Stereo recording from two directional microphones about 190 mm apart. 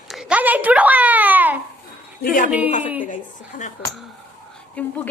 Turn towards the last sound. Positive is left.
turn(degrees=5)  # may be behind; listen again after turning